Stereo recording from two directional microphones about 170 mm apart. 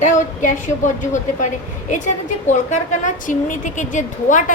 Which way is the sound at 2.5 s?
45° left (ahead or behind).